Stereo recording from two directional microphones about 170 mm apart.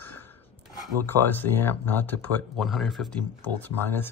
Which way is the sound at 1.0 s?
10° left (ahead or behind).